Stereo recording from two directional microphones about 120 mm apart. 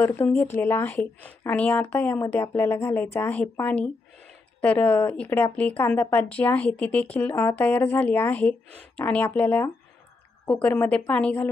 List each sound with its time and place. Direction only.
0.0 s speech: 20° left (ahead or behind)